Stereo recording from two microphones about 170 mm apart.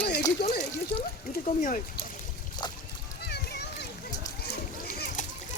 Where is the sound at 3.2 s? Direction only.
75° left (ahead or behind).